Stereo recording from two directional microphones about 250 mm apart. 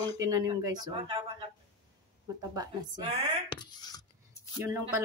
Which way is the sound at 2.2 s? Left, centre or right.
Centre.